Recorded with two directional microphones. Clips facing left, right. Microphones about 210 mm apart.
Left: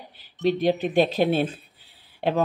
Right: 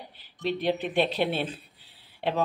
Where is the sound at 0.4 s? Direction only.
40° left (ahead or behind).